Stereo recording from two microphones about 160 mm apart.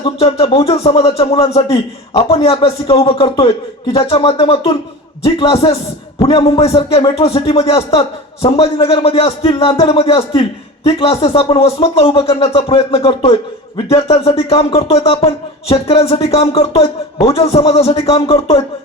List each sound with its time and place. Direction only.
0.0 s a man's voice: 40° left (ahead or behind)